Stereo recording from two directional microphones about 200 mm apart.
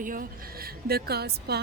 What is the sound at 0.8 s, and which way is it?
Speech, 50° right (ahead or behind).